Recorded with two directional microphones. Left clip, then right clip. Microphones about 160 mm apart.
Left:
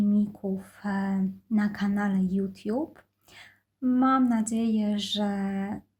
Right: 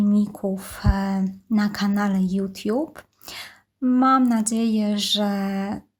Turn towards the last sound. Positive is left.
turn(degrees=-25)  # may be behind; listen again after turning